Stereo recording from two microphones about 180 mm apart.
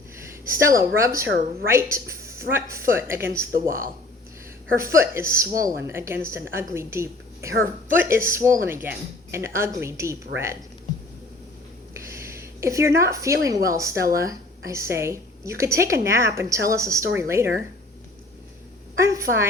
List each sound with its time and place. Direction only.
0.3 s a woman's voice: 15° right (ahead or behind)
4.8 s a woman's voice: 15° right (ahead or behind)
11.9 s a sound: 15° right (ahead or behind)
13.7 s a woman's voice: 15° right (ahead or behind)
18.9 s a woman's voice: 15° right (ahead or behind)